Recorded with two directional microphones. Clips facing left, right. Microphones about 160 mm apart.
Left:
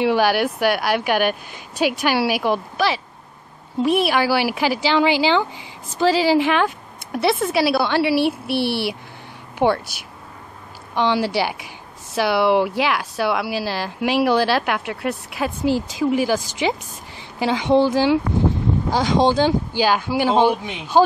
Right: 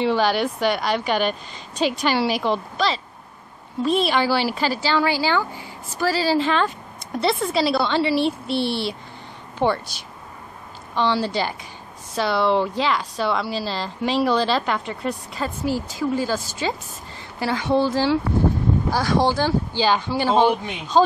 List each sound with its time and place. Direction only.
0.0 s speech: 10° left (ahead or behind)